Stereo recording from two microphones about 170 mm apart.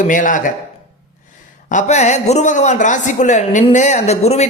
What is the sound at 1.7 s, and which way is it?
A man's voice, 45° left (ahead or behind).